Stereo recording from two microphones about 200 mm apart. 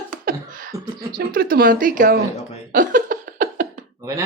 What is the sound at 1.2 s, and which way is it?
Speech, 50° right (ahead or behind).